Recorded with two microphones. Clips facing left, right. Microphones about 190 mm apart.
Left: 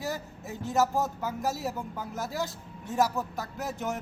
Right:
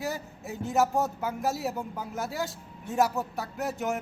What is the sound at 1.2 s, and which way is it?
Speech, centre (ahead or behind).